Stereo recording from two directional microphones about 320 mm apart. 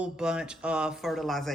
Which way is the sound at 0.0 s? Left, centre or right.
Centre.